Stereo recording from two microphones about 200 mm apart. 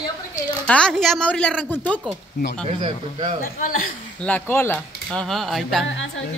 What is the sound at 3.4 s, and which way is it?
Speech, 45° left (ahead or behind).